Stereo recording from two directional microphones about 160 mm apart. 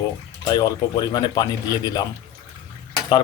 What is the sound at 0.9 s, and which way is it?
Speech, 25° left (ahead or behind).